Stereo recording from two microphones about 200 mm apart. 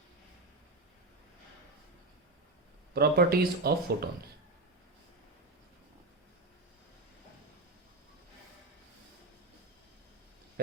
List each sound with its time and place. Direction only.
2.9 s speech: 50° right (ahead or behind)